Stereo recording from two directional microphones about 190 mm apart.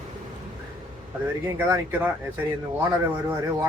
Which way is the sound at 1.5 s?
15° right (ahead or behind).